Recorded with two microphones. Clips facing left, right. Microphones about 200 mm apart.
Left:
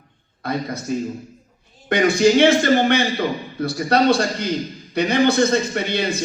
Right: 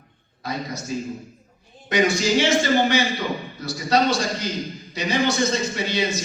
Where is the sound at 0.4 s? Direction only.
55° left (ahead or behind).